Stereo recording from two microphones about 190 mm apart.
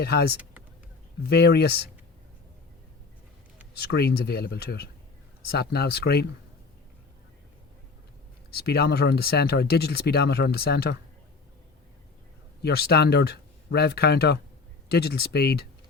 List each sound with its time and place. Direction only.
0.0 s speech: 55° left (ahead or behind)
3.8 s speech: 55° left (ahead or behind)
8.4 s speech: 55° left (ahead or behind)
12.6 s speech: 55° left (ahead or behind)